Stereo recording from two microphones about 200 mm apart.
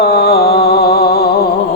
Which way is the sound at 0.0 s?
50° left (ahead or behind).